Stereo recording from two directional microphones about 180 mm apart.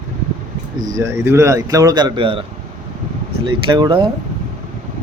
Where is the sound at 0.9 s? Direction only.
15° right (ahead or behind).